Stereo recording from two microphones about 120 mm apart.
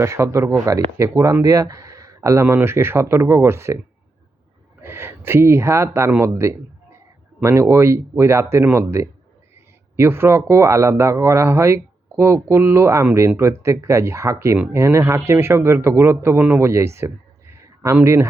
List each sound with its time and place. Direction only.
0.0 s speech: 25° right (ahead or behind)
4.8 s speech: 20° right (ahead or behind)